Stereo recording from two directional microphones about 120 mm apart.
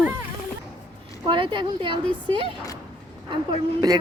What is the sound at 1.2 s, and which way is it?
A woman's voice, 45° right (ahead or behind).